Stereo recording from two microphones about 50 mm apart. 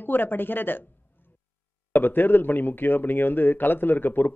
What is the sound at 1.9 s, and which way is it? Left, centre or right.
A woman's voice, left.